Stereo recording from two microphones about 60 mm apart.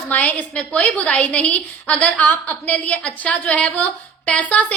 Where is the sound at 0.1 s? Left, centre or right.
Left.